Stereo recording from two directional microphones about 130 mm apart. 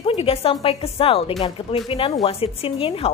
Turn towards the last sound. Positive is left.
turn(degrees=45)  # may be behind; listen again after turning